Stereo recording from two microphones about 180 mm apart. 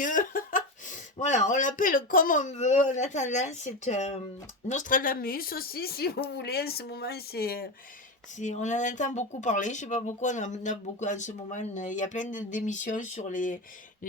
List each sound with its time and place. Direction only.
0.0 s speech: 45° left (ahead or behind)
8.4 s speech: 40° left (ahead or behind)